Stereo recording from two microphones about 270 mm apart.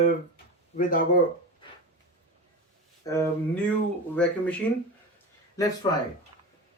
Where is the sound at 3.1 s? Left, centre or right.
Centre.